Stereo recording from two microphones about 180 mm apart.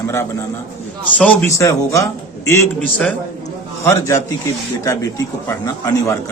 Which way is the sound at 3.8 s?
15° left (ahead or behind).